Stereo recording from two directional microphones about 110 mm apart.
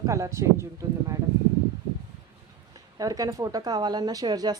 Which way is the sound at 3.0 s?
30° right (ahead or behind).